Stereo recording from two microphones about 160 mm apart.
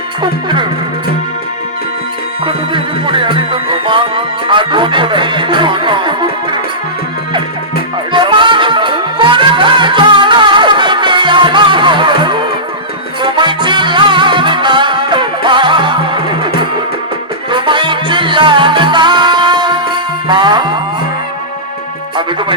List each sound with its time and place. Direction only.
0.2 s music: 30° right (ahead or behind)
2.5 s music: 30° right (ahead or behind)
8.1 s music: 30° right (ahead or behind)